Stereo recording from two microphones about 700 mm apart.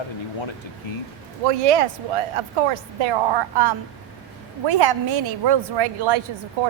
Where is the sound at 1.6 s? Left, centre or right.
Right.